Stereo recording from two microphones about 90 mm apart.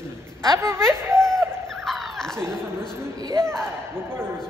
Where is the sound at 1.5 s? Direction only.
5° left (ahead or behind).